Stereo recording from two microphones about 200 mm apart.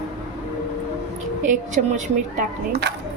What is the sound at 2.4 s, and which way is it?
Speech, 50° right (ahead or behind).